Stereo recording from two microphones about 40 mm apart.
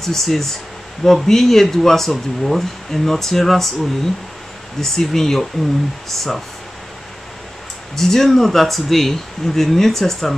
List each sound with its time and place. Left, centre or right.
0.0 s speech: centre
4.7 s speech: centre
7.9 s speech: centre